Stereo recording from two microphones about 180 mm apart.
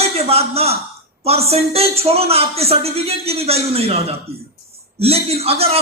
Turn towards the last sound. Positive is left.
turn(degrees=-35)  # may be behind; listen again after turning